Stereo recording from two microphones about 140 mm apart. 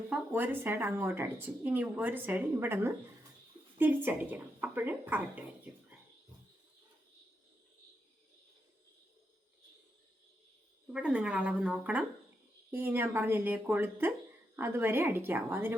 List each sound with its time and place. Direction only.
0.1 s speech: 15° right (ahead or behind)
10.9 s speech: 5° right (ahead or behind)